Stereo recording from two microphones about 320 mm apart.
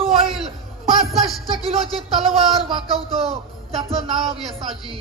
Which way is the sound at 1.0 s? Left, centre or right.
Centre.